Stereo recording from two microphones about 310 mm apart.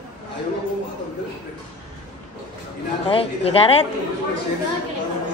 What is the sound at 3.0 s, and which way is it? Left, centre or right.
Speech, centre.